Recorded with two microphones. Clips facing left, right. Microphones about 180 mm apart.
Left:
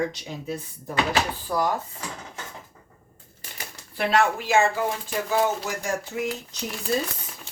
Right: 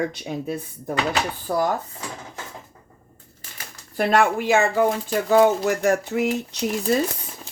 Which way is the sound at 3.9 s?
50° right (ahead or behind).